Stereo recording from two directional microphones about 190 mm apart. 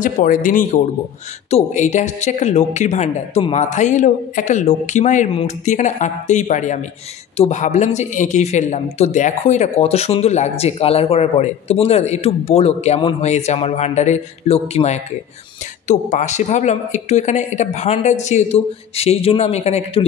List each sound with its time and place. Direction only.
0.0 s a man's voice: 45° left (ahead or behind)